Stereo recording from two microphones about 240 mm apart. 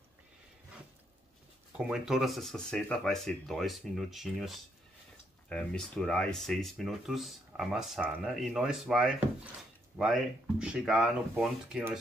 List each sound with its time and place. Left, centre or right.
1.8 s speech: centre